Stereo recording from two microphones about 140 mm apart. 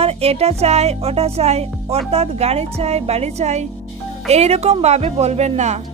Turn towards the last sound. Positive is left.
turn(degrees=-55)  # may be behind; listen again after turning